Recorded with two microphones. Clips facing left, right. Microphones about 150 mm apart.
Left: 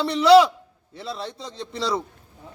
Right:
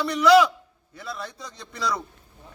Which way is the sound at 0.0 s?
30° left (ahead or behind).